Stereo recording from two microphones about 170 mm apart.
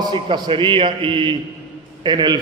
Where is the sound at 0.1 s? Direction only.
30° right (ahead or behind).